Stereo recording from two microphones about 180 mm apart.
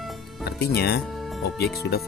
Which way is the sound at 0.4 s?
60° left (ahead or behind).